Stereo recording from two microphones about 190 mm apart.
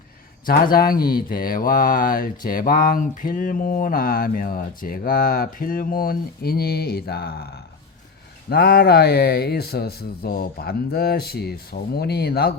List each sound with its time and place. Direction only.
0.4 s speech: 50° left (ahead or behind)